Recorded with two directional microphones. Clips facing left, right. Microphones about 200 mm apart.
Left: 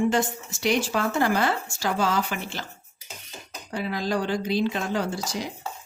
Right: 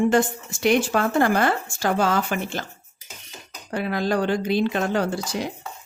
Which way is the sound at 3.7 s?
60° right (ahead or behind).